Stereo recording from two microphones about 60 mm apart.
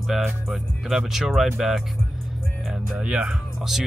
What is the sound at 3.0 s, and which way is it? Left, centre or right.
Speech, centre.